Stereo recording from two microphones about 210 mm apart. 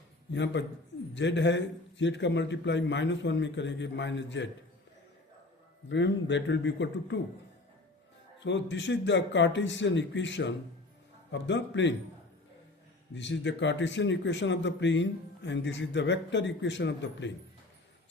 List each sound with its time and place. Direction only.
0.3 s speech: 60° left (ahead or behind)
5.9 s speech: 60° left (ahead or behind)
8.4 s speech: 60° left (ahead or behind)
13.1 s speech: 60° left (ahead or behind)